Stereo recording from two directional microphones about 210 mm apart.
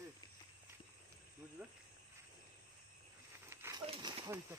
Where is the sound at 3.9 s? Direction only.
30° right (ahead or behind).